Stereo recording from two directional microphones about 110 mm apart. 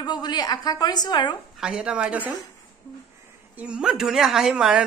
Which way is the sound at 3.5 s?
10° right (ahead or behind).